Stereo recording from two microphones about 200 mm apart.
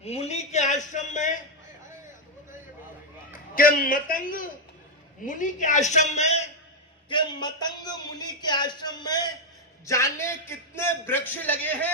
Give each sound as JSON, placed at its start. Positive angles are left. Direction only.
{"t": 0.0, "sound": "a sound", "side_deg": 30}
{"t": 3.5, "sound": "a man's voice", "side_deg": 45}
{"t": 7.1, "sound": "a man's voice", "side_deg": 25}